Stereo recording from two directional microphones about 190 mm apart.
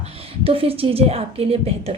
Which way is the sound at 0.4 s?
30° right (ahead or behind).